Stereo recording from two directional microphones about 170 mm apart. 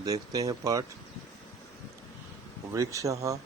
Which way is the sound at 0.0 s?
20° right (ahead or behind).